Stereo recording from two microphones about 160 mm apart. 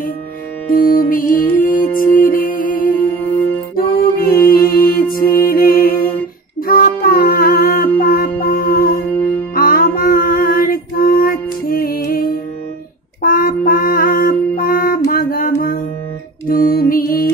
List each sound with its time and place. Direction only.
0.7 s music: 60° left (ahead or behind)